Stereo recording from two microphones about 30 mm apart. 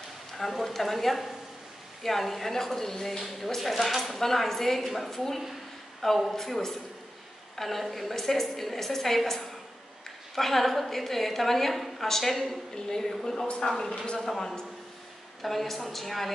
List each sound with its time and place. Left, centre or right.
0.5 s a woman's voice: centre
4.2 s a woman's voice: centre
4.8 s a woman's voice: centre
12.7 s a woman's voice: centre
15.4 s speech: centre